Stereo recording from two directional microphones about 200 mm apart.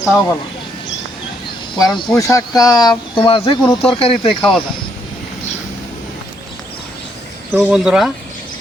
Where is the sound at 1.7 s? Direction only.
20° left (ahead or behind).